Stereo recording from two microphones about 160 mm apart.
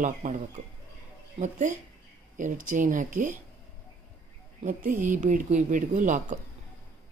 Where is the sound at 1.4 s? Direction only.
50° right (ahead or behind).